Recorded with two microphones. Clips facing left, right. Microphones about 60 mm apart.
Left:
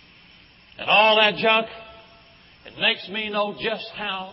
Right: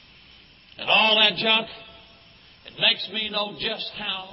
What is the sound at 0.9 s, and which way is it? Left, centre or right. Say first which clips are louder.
Speech: left 4 dB; left.